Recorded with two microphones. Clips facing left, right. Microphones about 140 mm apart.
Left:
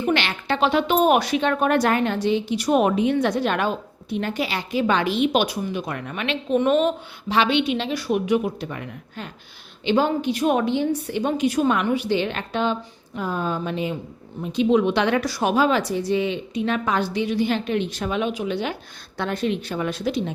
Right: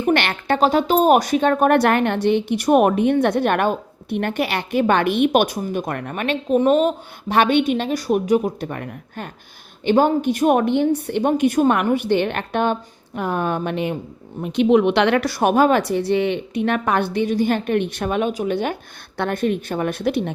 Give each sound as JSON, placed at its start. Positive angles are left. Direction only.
{"t": 0.0, "sound": "speech", "side_deg": -55}